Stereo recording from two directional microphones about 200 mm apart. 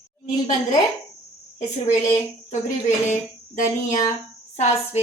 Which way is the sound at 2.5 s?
35° left (ahead or behind).